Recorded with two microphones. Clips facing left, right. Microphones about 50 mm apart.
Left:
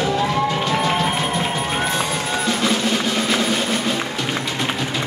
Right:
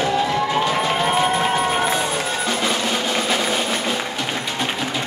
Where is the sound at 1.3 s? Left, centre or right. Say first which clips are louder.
Right 3 dB; centre.